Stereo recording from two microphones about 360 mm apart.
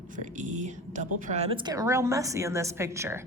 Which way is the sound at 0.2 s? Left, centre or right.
Right.